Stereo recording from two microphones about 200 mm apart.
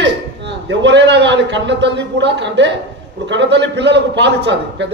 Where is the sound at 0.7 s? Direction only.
60° right (ahead or behind).